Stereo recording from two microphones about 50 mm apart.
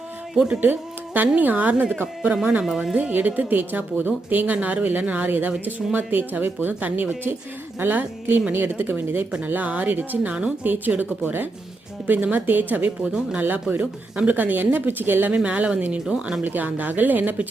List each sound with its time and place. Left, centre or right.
0.3 s speech: centre
0.6 s a woman's voice: right
2.3 s speech: right
2.9 s a woman's voice: right
12.0 s a woman's voice: right
13.0 s speech: centre
13.4 s a woman's voice: right
15.4 s speech: right
16.4 s a woman's voice: right